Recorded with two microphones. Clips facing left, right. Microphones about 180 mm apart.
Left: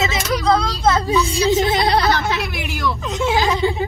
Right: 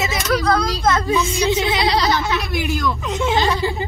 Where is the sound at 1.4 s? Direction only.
45° left (ahead or behind).